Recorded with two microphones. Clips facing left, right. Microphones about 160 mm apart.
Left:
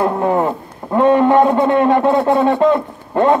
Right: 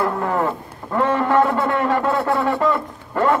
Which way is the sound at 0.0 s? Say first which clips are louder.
Left 5 dB; 20° left (ahead or behind).